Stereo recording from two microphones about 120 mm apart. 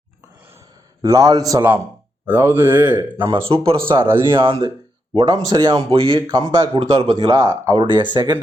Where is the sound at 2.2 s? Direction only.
20° right (ahead or behind).